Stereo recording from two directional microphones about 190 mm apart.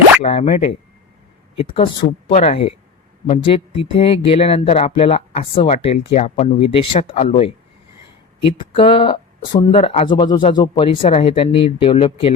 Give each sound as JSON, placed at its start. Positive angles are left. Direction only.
{"t": 0.2, "sound": "speech", "side_deg": 30}
{"t": 1.5, "sound": "speech", "side_deg": 30}